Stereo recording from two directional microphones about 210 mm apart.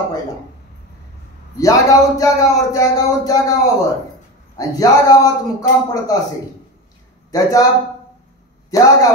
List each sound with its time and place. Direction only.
1.6 s speech: 15° left (ahead or behind)
7.2 s a man's voice: 15° left (ahead or behind)